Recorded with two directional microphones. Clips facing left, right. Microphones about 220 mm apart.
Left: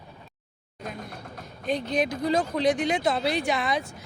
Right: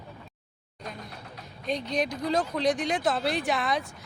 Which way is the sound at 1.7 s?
5° left (ahead or behind).